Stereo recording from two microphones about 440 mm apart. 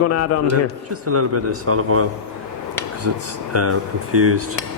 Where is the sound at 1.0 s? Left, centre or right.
Right.